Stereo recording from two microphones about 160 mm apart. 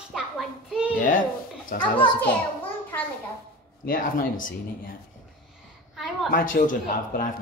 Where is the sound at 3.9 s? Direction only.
55° left (ahead or behind).